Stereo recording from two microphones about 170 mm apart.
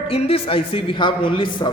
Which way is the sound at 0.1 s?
35° left (ahead or behind).